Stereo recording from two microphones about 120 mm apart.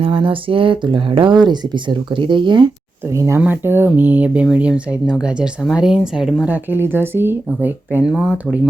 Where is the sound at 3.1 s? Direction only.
25° right (ahead or behind).